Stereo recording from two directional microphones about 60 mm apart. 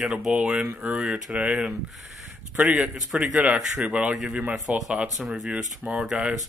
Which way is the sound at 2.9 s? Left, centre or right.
Centre.